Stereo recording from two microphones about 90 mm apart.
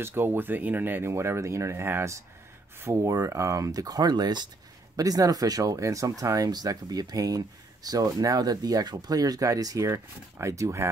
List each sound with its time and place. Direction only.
0.0 s speech: 25° right (ahead or behind); by 4.5 s 55° right (ahead or behind)
4.9 s speech: 40° right (ahead or behind)